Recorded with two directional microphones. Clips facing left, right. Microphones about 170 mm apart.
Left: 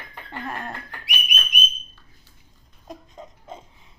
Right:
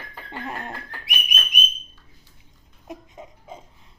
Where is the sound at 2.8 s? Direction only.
15° right (ahead or behind).